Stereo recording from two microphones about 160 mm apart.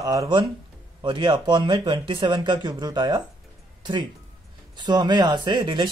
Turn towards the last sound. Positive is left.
turn(degrees=-30)  # may be behind; listen again after turning